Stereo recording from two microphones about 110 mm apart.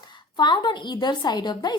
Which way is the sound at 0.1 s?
45° left (ahead or behind).